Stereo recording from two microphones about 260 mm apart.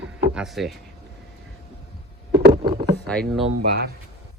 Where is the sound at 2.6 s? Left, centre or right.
Centre.